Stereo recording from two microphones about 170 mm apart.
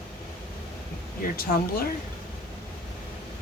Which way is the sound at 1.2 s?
55° left (ahead or behind).